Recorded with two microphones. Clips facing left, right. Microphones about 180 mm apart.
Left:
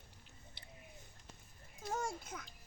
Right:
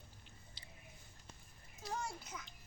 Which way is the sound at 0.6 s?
60° left (ahead or behind).